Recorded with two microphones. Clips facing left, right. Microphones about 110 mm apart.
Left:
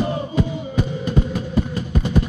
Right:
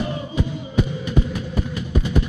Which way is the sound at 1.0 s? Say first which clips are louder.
Left 2 dB; 40° left (ahead or behind).